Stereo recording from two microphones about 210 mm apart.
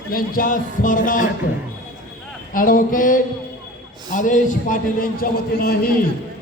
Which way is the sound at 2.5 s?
40° left (ahead or behind).